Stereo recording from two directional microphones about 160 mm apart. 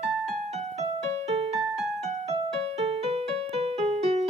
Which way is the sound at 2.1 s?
40° right (ahead or behind).